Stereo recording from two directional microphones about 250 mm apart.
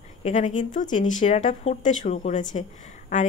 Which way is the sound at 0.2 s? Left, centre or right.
Left.